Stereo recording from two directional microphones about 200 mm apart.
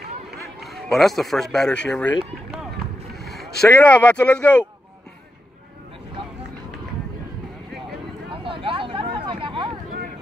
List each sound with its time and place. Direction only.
0.6 s speech: centre (ahead or behind)
3.2 s vehicle: centre (ahead or behind)
3.6 s speech: 5° left (ahead or behind)
8.3 s a sound: 25° right (ahead or behind)